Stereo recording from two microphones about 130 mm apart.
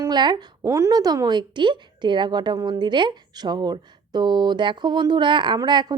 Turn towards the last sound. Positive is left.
turn(degrees=-35)  # may be behind; listen again after turning